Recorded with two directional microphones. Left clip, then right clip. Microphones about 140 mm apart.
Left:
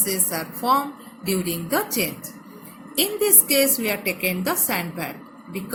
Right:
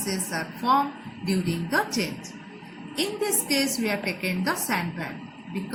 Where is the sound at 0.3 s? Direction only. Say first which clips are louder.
Left 1 dB; 65° left (ahead or behind).